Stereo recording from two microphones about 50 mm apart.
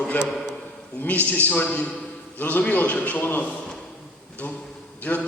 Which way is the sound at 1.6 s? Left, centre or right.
Left.